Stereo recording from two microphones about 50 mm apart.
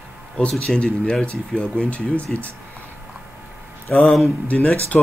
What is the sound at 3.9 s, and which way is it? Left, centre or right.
Speech, centre.